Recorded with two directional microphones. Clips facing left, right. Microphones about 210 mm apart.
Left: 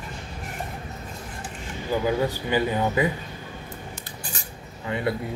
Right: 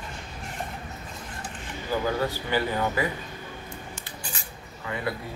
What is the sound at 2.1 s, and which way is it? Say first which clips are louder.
Speech: left 4 dB; 15° left (ahead or behind).